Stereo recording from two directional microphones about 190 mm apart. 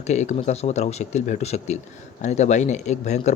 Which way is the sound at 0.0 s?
40° left (ahead or behind).